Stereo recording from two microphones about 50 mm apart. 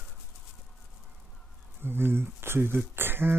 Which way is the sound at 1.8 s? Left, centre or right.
Right.